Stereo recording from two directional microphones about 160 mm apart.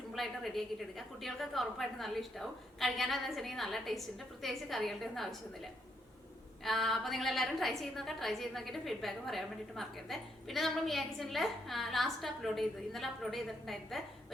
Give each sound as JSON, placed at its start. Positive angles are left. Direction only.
{"t": 0.1, "sound": "a woman's voice", "side_deg": 0}
{"t": 6.7, "sound": "a woman's voice", "side_deg": 0}